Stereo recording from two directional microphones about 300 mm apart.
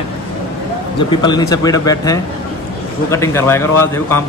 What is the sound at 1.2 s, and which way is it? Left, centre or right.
Speech, centre.